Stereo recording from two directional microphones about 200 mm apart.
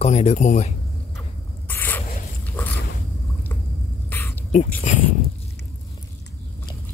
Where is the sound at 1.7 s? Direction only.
10° left (ahead or behind).